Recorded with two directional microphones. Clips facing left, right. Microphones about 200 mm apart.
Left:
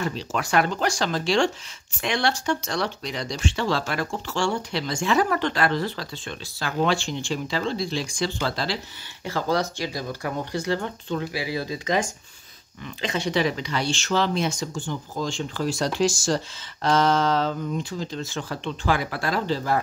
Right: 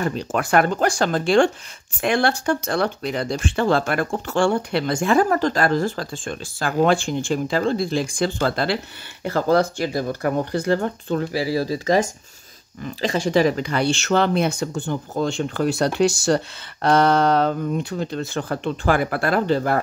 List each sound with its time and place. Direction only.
0.0 s speech: 50° right (ahead or behind)